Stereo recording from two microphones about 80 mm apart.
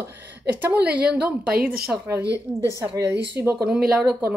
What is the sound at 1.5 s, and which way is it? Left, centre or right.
Speech, centre.